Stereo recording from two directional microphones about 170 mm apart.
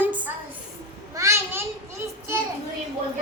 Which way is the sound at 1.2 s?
15° right (ahead or behind).